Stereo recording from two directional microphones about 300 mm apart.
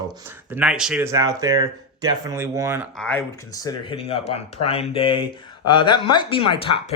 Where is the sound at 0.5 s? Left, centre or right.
Centre.